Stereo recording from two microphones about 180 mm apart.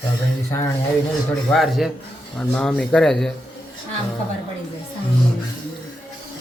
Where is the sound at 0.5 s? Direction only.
15° left (ahead or behind).